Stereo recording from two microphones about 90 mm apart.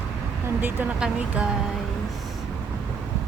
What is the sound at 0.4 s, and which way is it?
Speech, 20° right (ahead or behind).